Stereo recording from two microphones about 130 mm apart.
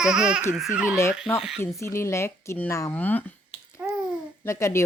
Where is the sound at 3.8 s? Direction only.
10° right (ahead or behind).